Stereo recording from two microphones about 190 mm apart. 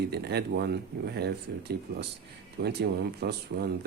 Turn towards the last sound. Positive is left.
turn(degrees=-55)  # may be behind; listen again after turning